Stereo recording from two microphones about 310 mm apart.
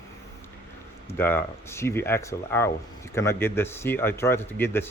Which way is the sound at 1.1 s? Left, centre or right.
Centre.